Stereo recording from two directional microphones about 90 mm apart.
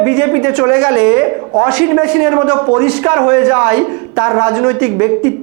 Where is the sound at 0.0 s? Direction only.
20° right (ahead or behind).